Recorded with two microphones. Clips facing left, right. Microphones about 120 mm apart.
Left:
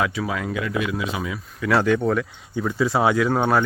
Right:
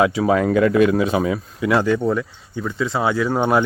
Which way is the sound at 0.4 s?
50° right (ahead or behind).